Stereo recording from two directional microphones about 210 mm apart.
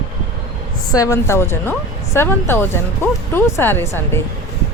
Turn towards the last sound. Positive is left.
turn(degrees=10)  # may be behind; listen again after turning